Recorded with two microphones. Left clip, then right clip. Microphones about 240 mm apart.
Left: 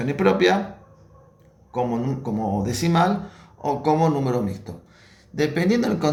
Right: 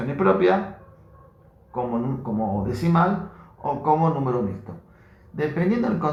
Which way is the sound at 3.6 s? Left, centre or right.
Left.